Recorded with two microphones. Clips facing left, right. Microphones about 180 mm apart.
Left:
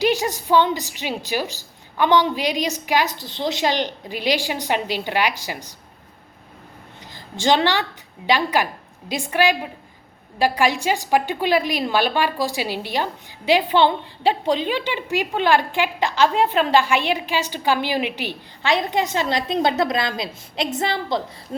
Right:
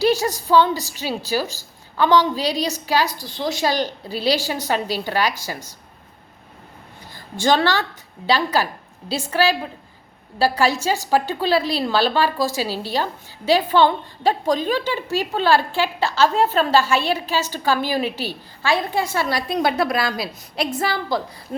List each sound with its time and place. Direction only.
0.0 s a sound: 15° left (ahead or behind)
0.4 s a woman's voice: 15° left (ahead or behind)
7.1 s a woman's voice: 20° left (ahead or behind)
14.3 s a woman's voice: 40° right (ahead or behind)
14.9 s a woman's voice: 15° left (ahead or behind)